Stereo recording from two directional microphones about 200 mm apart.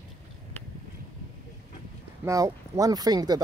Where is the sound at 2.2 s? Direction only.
15° right (ahead or behind).